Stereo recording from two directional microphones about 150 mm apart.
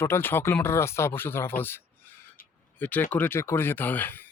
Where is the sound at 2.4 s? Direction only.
70° left (ahead or behind).